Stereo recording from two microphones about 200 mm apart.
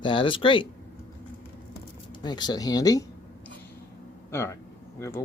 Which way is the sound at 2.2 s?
20° left (ahead or behind).